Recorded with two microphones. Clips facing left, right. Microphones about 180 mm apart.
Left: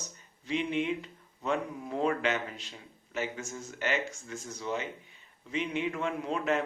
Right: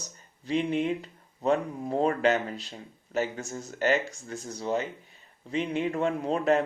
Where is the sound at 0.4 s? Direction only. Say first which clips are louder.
Right 4 dB; 40° right (ahead or behind).